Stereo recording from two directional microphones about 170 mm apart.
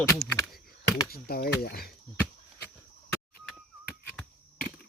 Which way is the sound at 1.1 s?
65° left (ahead or behind).